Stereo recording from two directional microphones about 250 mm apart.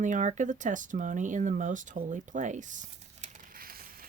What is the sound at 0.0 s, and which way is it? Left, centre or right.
Speech, right.